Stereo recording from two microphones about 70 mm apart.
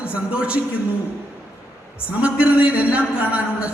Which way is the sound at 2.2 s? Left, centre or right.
Centre.